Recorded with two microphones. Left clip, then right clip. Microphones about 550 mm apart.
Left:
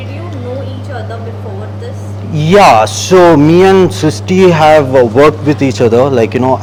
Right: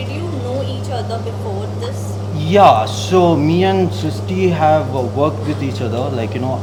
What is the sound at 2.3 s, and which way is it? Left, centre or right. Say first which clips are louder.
A man's voice: left 5 dB; left.